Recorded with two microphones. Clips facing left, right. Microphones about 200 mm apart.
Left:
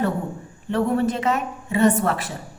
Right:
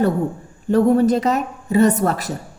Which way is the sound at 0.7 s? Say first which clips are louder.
Right 7 dB; 40° right (ahead or behind).